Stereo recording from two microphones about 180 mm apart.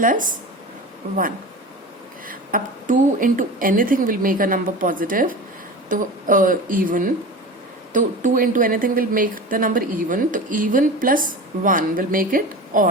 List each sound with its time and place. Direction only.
0.0 s speech: 50° right (ahead or behind)
2.2 s speech: 50° right (ahead or behind)